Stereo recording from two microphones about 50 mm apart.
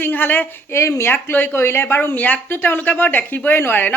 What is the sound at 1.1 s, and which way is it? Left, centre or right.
Speech, left.